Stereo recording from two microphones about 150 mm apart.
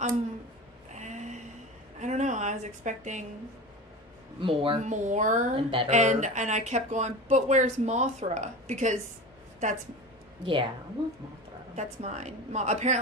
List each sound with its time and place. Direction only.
0.9 s a sound: 50° right (ahead or behind)
4.4 s speech: 35° right (ahead or behind)
4.8 s speech: 55° right (ahead or behind)
5.5 s speech: 35° right (ahead or behind)
5.9 s speech: 50° right (ahead or behind)
10.4 s speech: 35° right (ahead or behind)
11.8 s speech: 50° right (ahead or behind)